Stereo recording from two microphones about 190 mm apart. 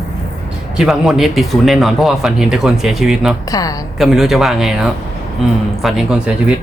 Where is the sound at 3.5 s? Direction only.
20° left (ahead or behind).